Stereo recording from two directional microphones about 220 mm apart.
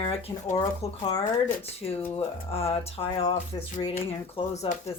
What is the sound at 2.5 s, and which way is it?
Speech, 25° left (ahead or behind).